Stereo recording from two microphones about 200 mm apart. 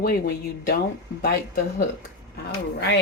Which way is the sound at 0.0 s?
50° left (ahead or behind).